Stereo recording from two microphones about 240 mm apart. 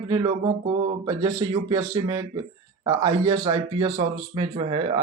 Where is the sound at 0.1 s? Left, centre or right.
Right.